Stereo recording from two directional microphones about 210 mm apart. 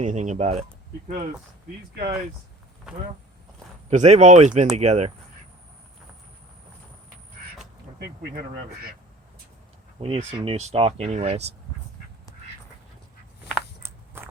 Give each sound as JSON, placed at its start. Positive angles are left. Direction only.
{"t": 0.0, "sound": "speech", "side_deg": -35}
{"t": 3.8, "sound": "speech", "side_deg": -35}
{"t": 7.9, "sound": "speech", "side_deg": -50}
{"t": 10.0, "sound": "speech", "side_deg": -25}
{"t": 13.5, "sound": "biting", "side_deg": -10}